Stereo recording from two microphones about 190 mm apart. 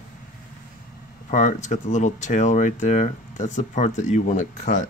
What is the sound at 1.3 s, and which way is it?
Speech, 40° left (ahead or behind).